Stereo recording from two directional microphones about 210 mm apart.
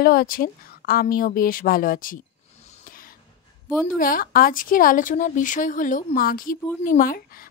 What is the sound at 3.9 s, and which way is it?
Speech, 40° left (ahead or behind).